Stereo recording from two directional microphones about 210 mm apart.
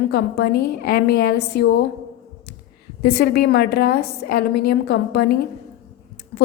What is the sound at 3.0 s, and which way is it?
A woman's voice, 50° left (ahead or behind).